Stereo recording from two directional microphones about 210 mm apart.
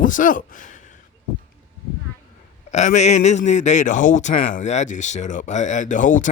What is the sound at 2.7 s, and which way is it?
A man's voice, 35° left (ahead or behind).